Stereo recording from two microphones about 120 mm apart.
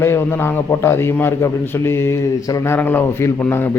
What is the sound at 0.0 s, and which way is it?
A man's voice, 20° left (ahead or behind).